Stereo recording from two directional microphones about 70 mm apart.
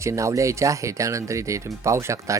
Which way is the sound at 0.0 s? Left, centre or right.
Right.